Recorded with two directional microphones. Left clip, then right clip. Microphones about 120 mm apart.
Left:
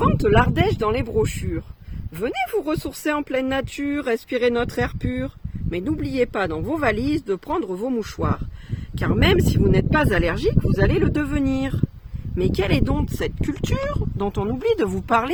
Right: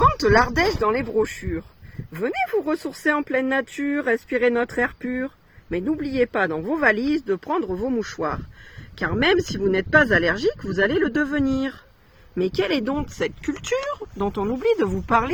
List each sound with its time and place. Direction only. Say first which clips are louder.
0.3 s speech: right 1 dB; 5° left (ahead or behind)
0.9 s speech: even; 20° left (ahead or behind)
14.2 s speech: right 1 dB; 40° left (ahead or behind)
14.8 s speech: even; 90° left